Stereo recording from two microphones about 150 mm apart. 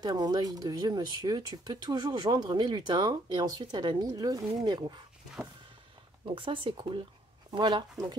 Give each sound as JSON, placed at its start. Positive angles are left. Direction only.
{"t": 0.0, "sound": "speech", "side_deg": -25}
{"t": 6.2, "sound": "speech", "side_deg": -35}